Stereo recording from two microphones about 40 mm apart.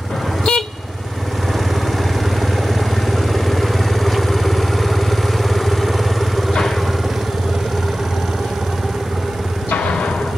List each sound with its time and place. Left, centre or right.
0.5 s vehicle: centre
3.1 s vehicle: centre
9.8 s a sound: left